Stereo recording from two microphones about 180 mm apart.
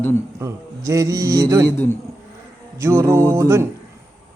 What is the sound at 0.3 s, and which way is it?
Speech, 15° right (ahead or behind).